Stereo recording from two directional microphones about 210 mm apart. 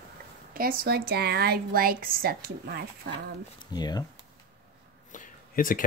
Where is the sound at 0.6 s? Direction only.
45° right (ahead or behind).